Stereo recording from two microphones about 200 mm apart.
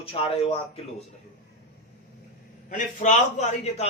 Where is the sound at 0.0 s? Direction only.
30° left (ahead or behind).